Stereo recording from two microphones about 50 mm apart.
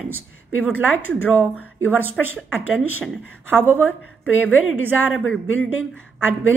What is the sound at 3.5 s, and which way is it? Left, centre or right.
Speech, right.